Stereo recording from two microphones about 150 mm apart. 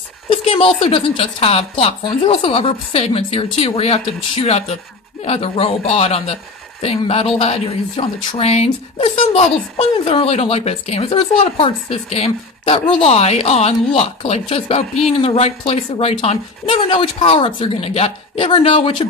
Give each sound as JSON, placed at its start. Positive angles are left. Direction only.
{"t": 0.3, "sound": "speech", "side_deg": 40}